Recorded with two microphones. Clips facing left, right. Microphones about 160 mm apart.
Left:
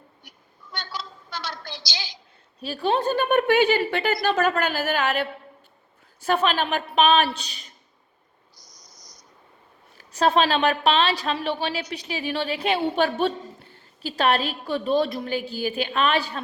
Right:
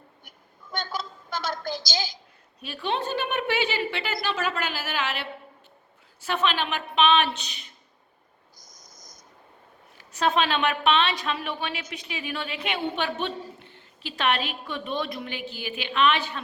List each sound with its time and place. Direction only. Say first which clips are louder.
0.3 s a sound: right 4 dB; 50° right (ahead or behind)
2.6 s a woman's voice: left 5 dB; 35° left (ahead or behind)
8.6 s cricket: right 1 dB; 50° right (ahead or behind)
10.0 s a woman's voice: left 4 dB; 35° left (ahead or behind)